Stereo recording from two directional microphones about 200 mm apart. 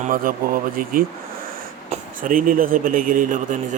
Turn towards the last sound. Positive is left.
turn(degrees=-40)  # may be behind; listen again after turning